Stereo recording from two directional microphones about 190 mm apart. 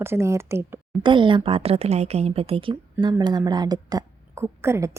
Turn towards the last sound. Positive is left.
turn(degrees=-15)  # may be behind; listen again after turning